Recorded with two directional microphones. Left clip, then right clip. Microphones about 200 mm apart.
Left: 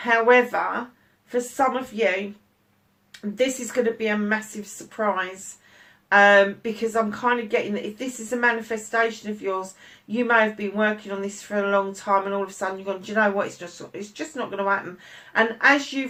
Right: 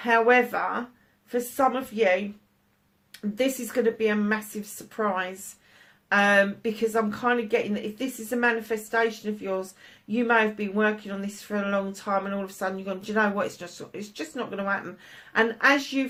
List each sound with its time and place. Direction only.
0.0 s speech: 45° right (ahead or behind)
3.9 s a woman's voice: 40° right (ahead or behind)